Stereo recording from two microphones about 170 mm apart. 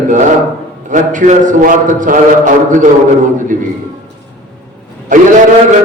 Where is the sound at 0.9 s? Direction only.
50° right (ahead or behind).